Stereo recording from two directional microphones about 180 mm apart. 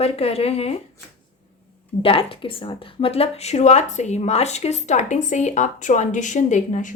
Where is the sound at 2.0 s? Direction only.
30° left (ahead or behind).